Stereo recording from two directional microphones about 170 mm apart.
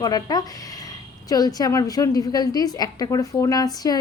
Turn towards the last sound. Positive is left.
turn(degrees=20)  # may be behind; listen again after turning